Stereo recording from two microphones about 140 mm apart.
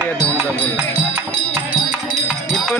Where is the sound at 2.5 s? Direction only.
5° left (ahead or behind).